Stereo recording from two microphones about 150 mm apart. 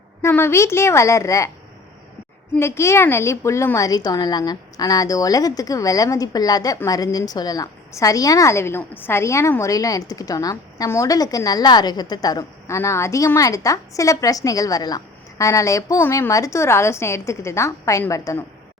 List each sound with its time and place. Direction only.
0.2 s a woman's voice: 15° left (ahead or behind)
2.6 s a woman's voice: 20° left (ahead or behind)